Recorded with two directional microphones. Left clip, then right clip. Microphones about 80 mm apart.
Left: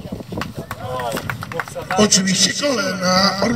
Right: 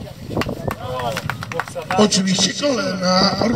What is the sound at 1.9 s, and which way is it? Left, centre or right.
A man's voice, left.